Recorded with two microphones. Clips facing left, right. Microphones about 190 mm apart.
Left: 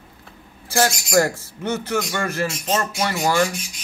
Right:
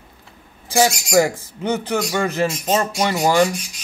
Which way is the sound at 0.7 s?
15° right (ahead or behind).